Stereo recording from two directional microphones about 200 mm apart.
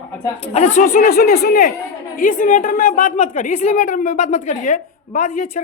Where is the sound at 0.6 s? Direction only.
35° left (ahead or behind).